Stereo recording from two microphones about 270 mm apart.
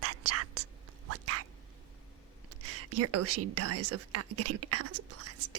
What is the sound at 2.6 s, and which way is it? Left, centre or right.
Whispering, right.